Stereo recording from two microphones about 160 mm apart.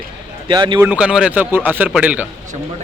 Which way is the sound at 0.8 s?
5° right (ahead or behind).